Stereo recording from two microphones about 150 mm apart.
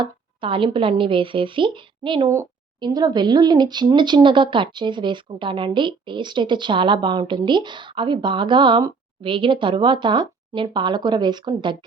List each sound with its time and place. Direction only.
0.0 s speech: 35° right (ahead or behind)
2.3 s speech: 20° right (ahead or behind)